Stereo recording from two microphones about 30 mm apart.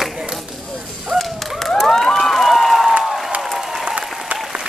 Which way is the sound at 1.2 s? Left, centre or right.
Centre.